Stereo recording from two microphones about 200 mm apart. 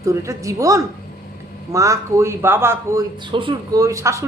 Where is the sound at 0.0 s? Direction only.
15° right (ahead or behind).